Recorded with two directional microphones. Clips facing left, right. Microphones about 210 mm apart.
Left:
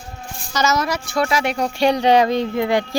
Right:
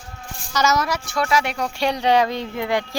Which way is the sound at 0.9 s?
25° left (ahead or behind).